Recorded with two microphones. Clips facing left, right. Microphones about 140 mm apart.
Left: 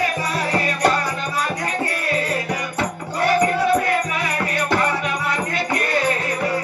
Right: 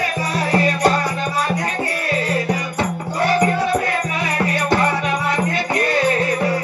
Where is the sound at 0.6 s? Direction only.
25° right (ahead or behind).